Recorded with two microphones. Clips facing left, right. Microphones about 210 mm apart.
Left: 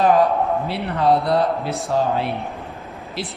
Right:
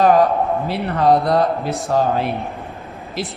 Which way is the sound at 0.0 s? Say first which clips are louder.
Right 2 dB; 45° right (ahead or behind).